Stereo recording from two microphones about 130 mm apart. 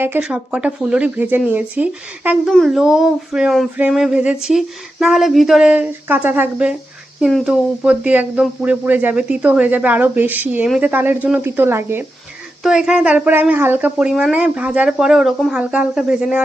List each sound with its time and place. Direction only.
0.0 s a woman's voice: 10° right (ahead or behind)
2.5 s a woman's voice: centre (ahead or behind); by 12.0 s 20° right (ahead or behind)
12.6 s a woman's voice: 5° right (ahead or behind)